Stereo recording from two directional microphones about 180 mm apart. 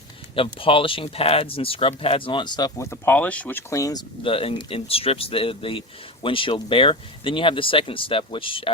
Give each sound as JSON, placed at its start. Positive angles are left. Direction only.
{"t": 0.3, "sound": "speech", "side_deg": 30}